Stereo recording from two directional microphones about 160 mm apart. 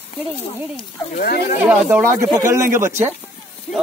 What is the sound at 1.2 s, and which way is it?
Speech, 70° left (ahead or behind).